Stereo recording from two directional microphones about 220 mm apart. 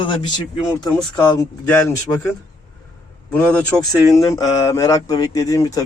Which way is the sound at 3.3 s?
5° left (ahead or behind).